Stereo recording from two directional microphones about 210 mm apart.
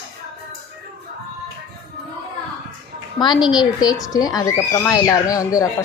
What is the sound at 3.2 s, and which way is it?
A woman's voice, 20° left (ahead or behind).